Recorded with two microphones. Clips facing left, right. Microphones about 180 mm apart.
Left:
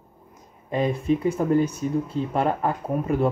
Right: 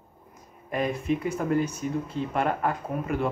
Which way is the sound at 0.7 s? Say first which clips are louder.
Left 4 dB; 30° left (ahead or behind).